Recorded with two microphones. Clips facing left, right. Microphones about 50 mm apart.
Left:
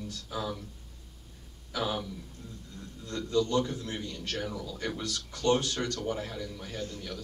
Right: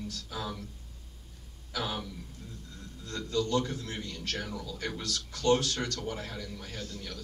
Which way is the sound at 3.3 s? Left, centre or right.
Left.